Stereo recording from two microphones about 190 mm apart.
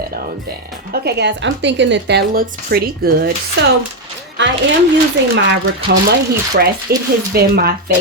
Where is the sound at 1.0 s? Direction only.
60° right (ahead or behind).